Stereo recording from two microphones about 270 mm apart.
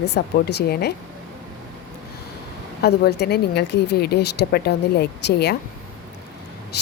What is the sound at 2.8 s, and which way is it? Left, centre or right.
Speech, left.